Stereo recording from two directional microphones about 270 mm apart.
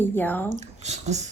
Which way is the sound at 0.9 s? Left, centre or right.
Right.